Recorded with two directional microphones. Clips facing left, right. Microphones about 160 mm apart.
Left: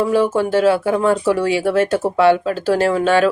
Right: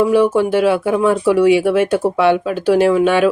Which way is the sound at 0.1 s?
15° right (ahead or behind).